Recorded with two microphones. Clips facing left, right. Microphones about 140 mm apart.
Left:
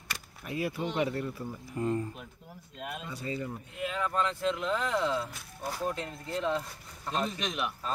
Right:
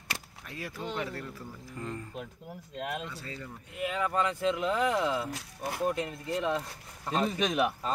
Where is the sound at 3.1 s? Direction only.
15° left (ahead or behind).